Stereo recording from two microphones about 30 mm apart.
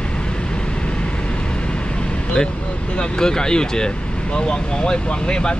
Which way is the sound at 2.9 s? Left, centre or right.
Left.